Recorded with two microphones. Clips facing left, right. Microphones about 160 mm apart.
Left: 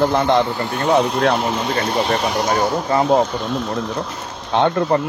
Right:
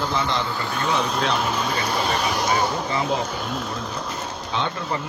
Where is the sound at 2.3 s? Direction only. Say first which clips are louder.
Left 4 dB; 55° left (ahead or behind).